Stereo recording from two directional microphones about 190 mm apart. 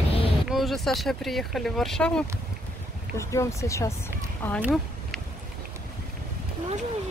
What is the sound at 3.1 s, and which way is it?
Speech, 15° left (ahead or behind).